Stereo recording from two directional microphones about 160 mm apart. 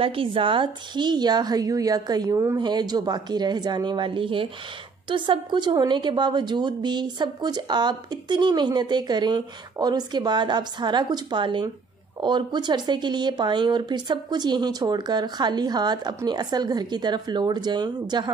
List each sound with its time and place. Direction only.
0.0 s a woman's voice: 35° right (ahead or behind)